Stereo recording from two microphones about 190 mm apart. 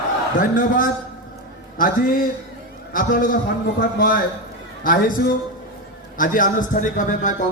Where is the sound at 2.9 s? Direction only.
50° left (ahead or behind).